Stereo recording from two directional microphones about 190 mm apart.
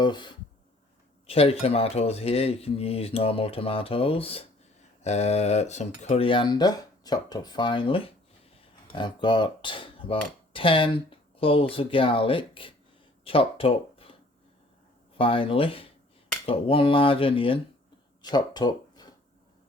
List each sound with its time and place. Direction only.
0.0 s speech: 25° left (ahead or behind)
15.2 s speech: 30° left (ahead or behind)